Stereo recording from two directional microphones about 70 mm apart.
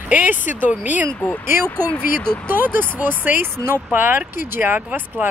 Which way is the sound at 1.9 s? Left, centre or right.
Centre.